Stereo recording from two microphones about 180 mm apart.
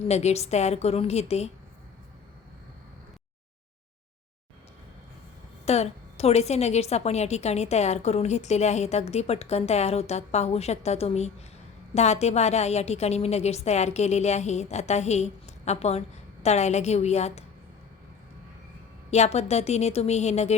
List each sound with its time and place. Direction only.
0.1 s a woman's voice: 40° left (ahead or behind)
5.6 s a woman's voice: 35° left (ahead or behind)
19.1 s a woman's voice: 35° left (ahead or behind)